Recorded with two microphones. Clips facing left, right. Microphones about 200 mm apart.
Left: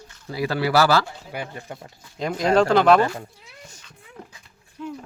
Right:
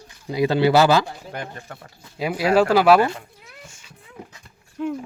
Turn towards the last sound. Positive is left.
turn(degrees=-60)  # may be behind; listen again after turning